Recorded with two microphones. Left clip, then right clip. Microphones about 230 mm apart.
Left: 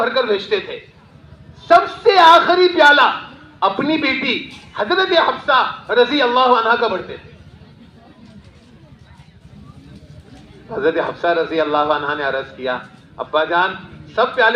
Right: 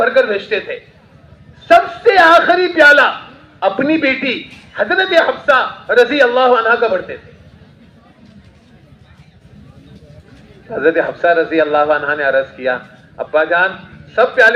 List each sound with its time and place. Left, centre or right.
0.0 s a man's voice: left
10.7 s a man's voice: left